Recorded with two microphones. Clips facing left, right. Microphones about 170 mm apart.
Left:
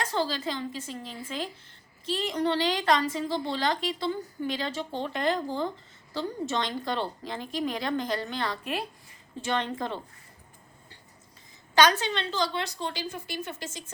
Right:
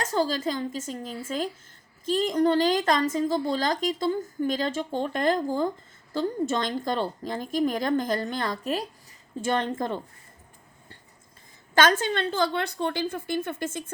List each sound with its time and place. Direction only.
0.0 s a woman's voice: 40° right (ahead or behind)
11.7 s a woman's voice: 50° right (ahead or behind)